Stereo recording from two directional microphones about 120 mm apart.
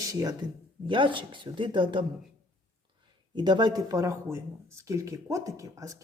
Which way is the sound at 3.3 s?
40° right (ahead or behind).